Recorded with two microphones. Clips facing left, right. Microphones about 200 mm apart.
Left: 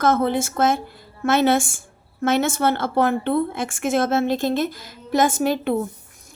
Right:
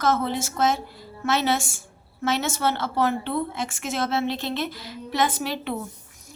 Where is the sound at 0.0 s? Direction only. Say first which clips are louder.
Left 5 dB; 55° left (ahead or behind).